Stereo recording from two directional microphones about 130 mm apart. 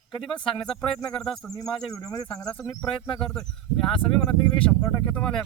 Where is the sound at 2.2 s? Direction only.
5° left (ahead or behind).